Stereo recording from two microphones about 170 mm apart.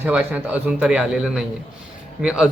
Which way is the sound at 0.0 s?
10° right (ahead or behind).